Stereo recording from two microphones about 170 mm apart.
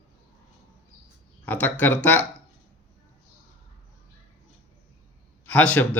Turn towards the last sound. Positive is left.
turn(degrees=10)  # may be behind; listen again after turning